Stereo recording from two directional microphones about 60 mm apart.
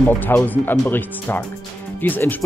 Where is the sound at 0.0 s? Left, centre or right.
Left.